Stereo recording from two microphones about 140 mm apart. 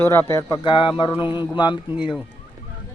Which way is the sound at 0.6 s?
35° left (ahead or behind).